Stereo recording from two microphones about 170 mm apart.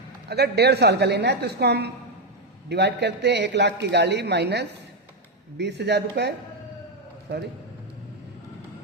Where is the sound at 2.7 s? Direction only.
90° right.